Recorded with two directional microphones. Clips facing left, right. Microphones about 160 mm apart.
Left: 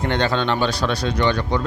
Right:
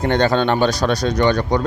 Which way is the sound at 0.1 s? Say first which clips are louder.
Right 5 dB; 45° right (ahead or behind).